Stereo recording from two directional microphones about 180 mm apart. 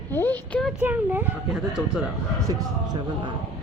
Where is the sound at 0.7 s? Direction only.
10° right (ahead or behind).